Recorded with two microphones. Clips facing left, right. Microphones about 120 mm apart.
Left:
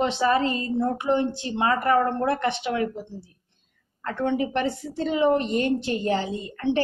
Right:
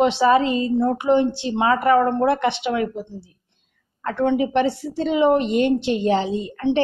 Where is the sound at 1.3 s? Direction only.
80° right.